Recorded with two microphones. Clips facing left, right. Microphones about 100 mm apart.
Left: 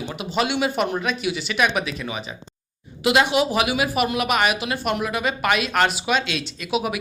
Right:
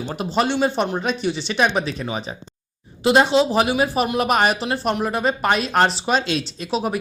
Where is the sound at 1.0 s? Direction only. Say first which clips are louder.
Right 2 dB; 35° right (ahead or behind).